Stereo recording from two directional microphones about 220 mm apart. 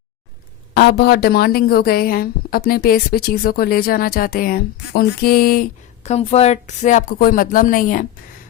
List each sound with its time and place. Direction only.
0.7 s a woman's voice: 45° left (ahead or behind)
6.1 s speech: 30° left (ahead or behind)